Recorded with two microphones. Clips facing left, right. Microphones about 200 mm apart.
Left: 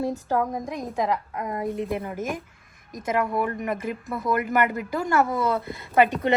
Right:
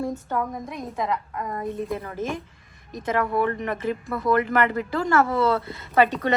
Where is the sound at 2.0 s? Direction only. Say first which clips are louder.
Even; 15° left (ahead or behind).